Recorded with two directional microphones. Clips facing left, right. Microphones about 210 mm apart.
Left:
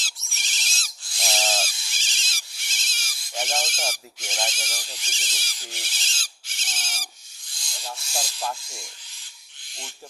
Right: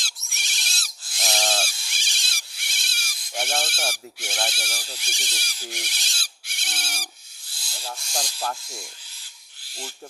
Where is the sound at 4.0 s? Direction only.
10° right (ahead or behind).